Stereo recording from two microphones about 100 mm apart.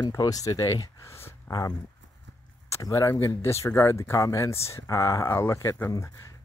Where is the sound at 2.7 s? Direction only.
30° left (ahead or behind).